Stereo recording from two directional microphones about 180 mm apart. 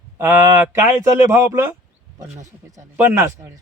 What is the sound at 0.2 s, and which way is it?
Speech, 10° right (ahead or behind).